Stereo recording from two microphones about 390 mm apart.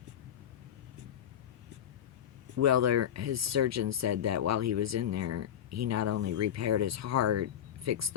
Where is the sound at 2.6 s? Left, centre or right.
Right.